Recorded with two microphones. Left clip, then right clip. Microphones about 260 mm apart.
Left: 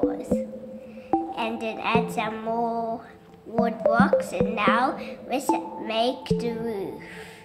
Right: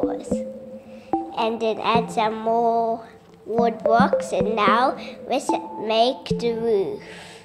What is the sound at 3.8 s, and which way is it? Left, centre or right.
Speech, centre.